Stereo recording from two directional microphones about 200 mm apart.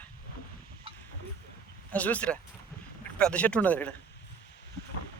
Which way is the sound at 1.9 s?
5° left (ahead or behind).